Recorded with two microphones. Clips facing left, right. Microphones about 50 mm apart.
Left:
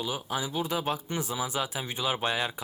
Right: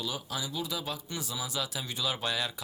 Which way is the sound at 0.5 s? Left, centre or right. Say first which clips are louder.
Left 8 dB; left.